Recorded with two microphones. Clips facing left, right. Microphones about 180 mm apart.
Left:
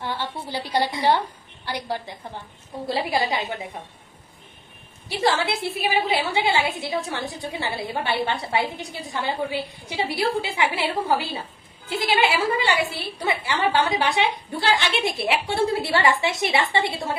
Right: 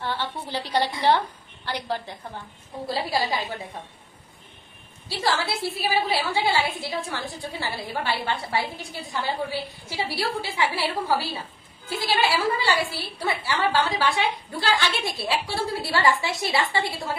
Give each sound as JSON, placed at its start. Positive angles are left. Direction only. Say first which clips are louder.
{"t": 0.0, "sound": "a woman's voice", "louder": "even", "side_deg": 10}
{"t": 5.0, "sound": "a woman's voice", "louder": "left 4 dB", "side_deg": 20}